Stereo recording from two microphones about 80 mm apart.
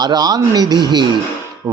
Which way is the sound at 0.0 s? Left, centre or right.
Right.